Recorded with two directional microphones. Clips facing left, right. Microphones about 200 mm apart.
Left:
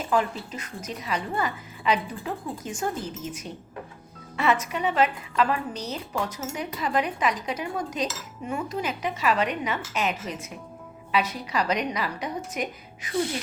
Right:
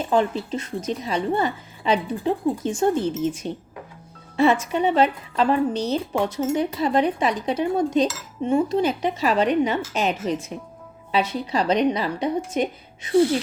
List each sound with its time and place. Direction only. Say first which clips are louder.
0.0 s a woman's voice: right 5 dB; 30° right (ahead or behind)